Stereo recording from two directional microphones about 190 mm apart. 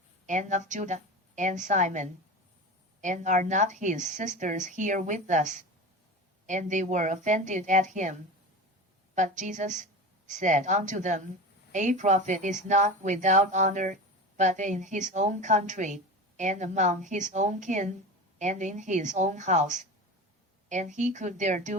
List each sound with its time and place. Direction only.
0.3 s speech: 40° right (ahead or behind)
9.1 s a woman's voice: 40° right (ahead or behind)